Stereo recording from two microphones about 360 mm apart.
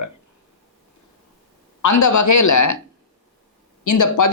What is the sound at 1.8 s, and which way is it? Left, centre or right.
Speech, left.